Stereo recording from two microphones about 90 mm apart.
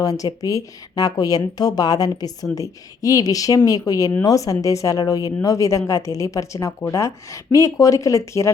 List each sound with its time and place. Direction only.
0.0 s speech: 45° left (ahead or behind)